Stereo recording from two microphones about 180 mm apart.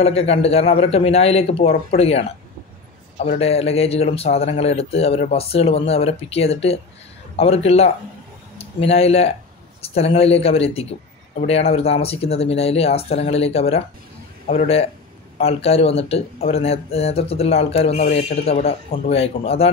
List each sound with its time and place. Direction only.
0.0 s speech: 35° left (ahead or behind)